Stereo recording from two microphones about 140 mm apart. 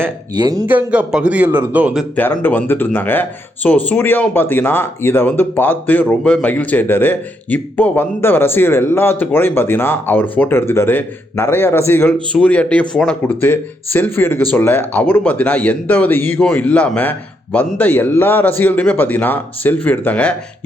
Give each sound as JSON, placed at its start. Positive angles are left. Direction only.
{"t": 0.3, "sound": "speech", "side_deg": -30}
{"t": 0.7, "sound": "a man's voice", "side_deg": -10}
{"t": 2.1, "sound": "speech", "side_deg": 15}